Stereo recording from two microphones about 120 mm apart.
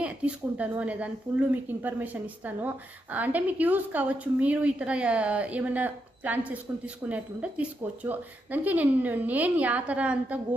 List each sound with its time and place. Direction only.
0.0 s a woman's voice: 10° right (ahead or behind)